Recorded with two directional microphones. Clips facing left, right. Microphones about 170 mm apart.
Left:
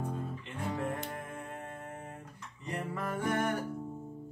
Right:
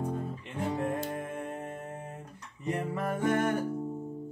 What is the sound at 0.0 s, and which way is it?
Music, 20° right (ahead or behind).